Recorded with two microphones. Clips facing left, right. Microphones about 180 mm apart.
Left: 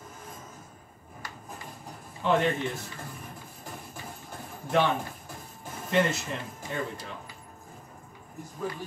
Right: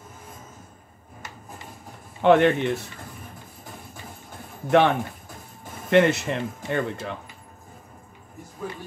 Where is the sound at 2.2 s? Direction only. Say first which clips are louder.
Right 8 dB; 70° right (ahead or behind).